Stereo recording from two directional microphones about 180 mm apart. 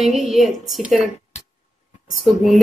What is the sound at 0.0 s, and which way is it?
Speech, centre (ahead or behind).